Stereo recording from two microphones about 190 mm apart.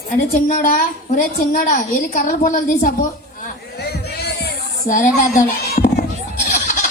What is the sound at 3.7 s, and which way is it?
Music, 55° left (ahead or behind).